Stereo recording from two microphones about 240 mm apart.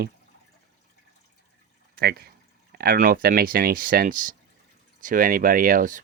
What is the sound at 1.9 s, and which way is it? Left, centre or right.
Speech, right.